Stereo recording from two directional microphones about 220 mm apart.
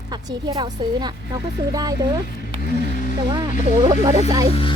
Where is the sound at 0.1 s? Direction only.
20° right (ahead or behind).